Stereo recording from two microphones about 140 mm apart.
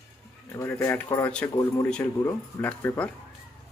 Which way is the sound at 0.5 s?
20° left (ahead or behind).